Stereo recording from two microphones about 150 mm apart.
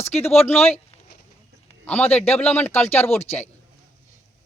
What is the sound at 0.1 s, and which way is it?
Speech, 5° left (ahead or behind).